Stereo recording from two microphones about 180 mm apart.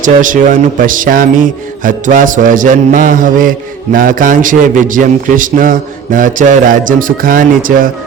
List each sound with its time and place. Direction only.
0.0 s a man's voice: 45° right (ahead or behind)